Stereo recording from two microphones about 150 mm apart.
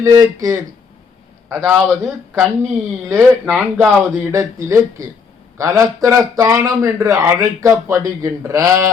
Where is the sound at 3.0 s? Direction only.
10° right (ahead or behind).